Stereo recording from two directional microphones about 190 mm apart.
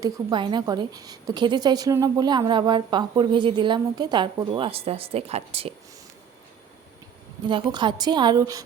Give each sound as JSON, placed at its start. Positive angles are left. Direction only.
{"t": 0.0, "sound": "a woman's voice", "side_deg": -25}
{"t": 7.4, "sound": "a woman's voice", "side_deg": -25}